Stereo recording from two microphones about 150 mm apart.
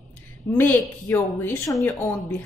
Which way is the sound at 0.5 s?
15° left (ahead or behind).